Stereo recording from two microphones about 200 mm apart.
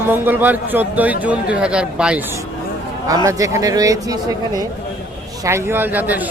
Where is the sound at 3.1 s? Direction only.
15° right (ahead or behind).